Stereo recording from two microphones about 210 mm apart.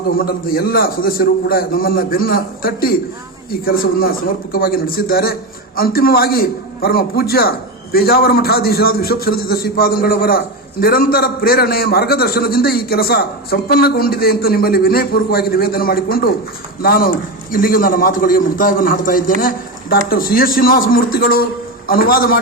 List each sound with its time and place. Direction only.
0.2 s a man's voice: 45° left (ahead or behind)